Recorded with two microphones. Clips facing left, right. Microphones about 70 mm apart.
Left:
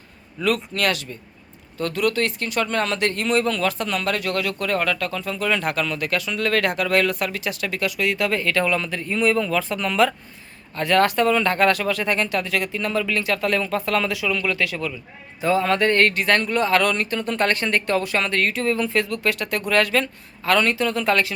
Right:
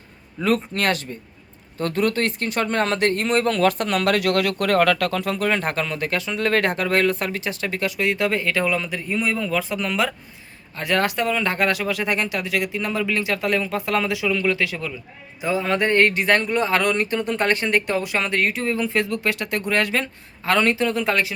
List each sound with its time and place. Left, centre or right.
0.4 s speech: right
5.5 s speech: right; by 21.3 s centre